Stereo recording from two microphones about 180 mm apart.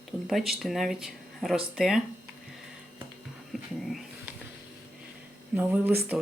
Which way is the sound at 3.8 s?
Centre (ahead or behind).